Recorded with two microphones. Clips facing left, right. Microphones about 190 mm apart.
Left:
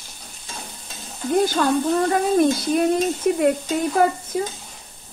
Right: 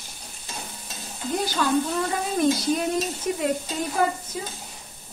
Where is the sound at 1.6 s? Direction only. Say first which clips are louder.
Left 4 dB; 50° left (ahead or behind).